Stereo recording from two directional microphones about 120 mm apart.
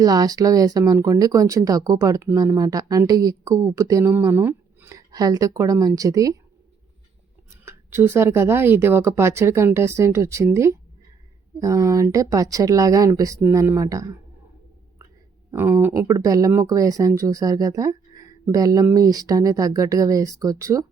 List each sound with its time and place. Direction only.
0.0 s speech: 30° right (ahead or behind)
4.9 s speech: 30° right (ahead or behind)
7.5 s speech: 20° right (ahead or behind)
15.5 s speech: 20° right (ahead or behind)